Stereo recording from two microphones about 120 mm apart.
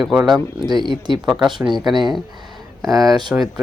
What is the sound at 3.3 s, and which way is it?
Speech, 10° right (ahead or behind).